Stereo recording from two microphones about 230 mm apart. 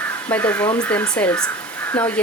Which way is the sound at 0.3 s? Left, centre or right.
Centre.